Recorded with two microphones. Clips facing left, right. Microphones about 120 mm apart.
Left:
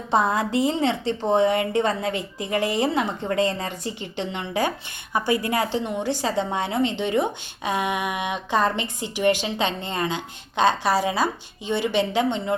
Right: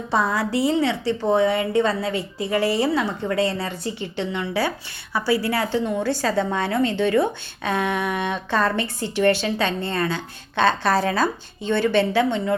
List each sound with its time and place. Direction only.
0.1 s a woman's voice: 20° left (ahead or behind)